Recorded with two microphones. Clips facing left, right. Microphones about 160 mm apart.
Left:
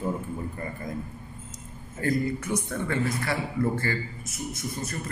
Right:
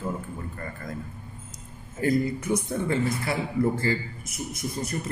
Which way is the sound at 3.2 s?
25° right (ahead or behind).